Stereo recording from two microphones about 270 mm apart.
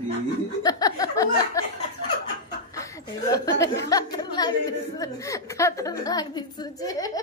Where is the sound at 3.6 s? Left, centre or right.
Centre.